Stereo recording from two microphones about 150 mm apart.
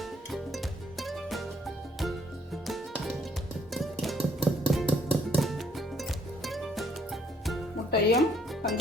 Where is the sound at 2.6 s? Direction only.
Centre (ahead or behind).